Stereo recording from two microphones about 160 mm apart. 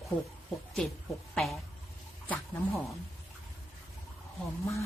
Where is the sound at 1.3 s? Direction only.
Centre (ahead or behind).